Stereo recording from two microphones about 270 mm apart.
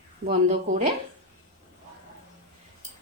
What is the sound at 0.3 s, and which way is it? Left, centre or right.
Speech, right.